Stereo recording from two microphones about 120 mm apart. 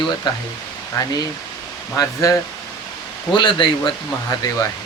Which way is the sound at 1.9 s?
30° left (ahead or behind).